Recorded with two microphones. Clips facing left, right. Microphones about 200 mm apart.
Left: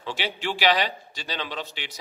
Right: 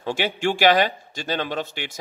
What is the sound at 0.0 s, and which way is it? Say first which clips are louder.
Speech: right 7 dB; 50° right (ahead or behind).